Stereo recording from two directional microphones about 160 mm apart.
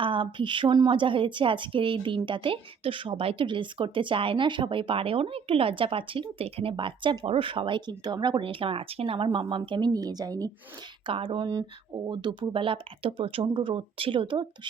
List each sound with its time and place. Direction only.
0.0 s speech: 30° right (ahead or behind)
11.0 s speech: 35° right (ahead or behind)